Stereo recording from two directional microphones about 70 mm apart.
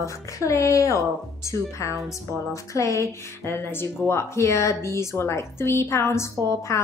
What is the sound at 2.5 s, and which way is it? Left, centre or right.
A woman's voice, left.